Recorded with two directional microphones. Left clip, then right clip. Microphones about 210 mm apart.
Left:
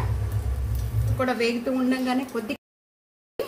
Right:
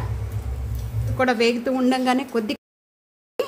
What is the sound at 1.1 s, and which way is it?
A woman's voice, 50° right (ahead or behind).